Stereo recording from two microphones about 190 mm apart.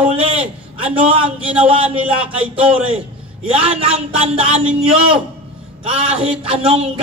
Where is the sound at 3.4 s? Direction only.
30° right (ahead or behind).